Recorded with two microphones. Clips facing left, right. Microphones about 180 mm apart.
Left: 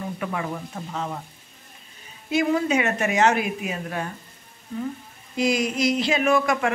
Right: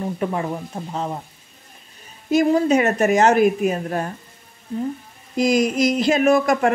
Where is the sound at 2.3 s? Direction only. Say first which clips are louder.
Right 5 dB; 40° right (ahead or behind).